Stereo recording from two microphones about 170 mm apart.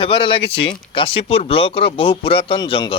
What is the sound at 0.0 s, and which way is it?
Speech, 30° left (ahead or behind).